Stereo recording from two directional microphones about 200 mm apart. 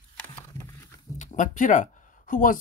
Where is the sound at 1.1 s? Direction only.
40° left (ahead or behind).